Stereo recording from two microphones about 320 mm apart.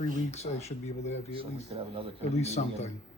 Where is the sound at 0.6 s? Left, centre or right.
Left.